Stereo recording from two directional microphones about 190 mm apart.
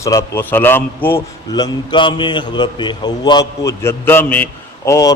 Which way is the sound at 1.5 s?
25° left (ahead or behind).